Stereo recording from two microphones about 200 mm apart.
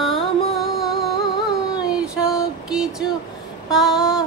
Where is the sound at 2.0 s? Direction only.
5° right (ahead or behind).